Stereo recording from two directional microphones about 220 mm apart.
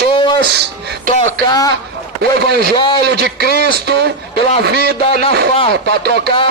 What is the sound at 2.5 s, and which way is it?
Speech, 45° right (ahead or behind).